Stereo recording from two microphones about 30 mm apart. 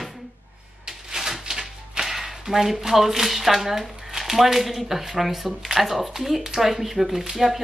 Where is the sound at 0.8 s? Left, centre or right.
Centre.